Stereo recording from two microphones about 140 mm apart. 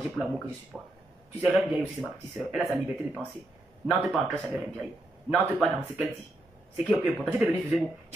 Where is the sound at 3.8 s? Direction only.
5° right (ahead or behind).